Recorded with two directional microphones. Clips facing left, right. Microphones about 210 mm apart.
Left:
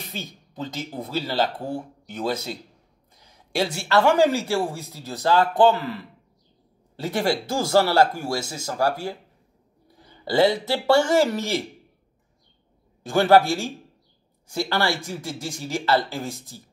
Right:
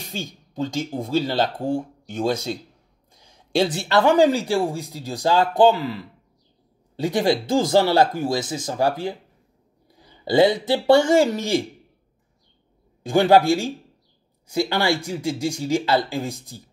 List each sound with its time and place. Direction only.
0.1 s speech: 15° right (ahead or behind)
3.6 s speech: 20° right (ahead or behind)
13.0 s speech: 15° right (ahead or behind)